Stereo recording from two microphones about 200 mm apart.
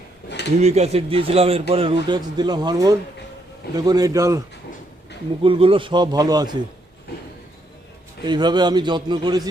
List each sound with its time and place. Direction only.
0.6 s a man's voice: 30° right (ahead or behind); by 4.4 s 15° right (ahead or behind)
5.4 s a man's voice: 25° right (ahead or behind)
8.2 s a man's voice: 20° right (ahead or behind)